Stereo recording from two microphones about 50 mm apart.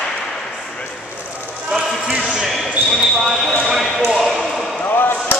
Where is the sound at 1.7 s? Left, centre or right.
Centre.